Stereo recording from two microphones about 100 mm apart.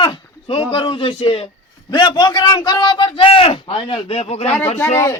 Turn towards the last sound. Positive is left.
turn(degrees=30)  # may be behind; listen again after turning